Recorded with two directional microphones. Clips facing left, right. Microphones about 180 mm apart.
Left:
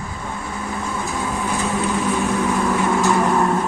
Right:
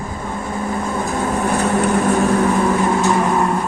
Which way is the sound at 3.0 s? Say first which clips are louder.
Right 1 dB; 20° right (ahead or behind).